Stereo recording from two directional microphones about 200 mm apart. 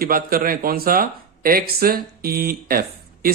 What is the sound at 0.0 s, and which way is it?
A man's voice, 45° right (ahead or behind).